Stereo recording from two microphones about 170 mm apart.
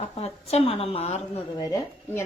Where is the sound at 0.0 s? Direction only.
35° left (ahead or behind).